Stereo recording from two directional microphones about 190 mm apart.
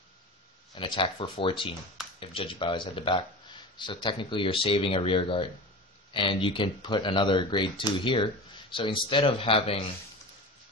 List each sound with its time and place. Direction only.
0.7 s speech: 25° left (ahead or behind)